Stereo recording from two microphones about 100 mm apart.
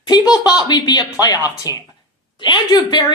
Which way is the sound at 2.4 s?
50° left (ahead or behind).